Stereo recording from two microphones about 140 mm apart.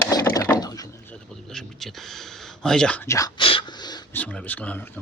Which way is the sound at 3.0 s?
20° left (ahead or behind).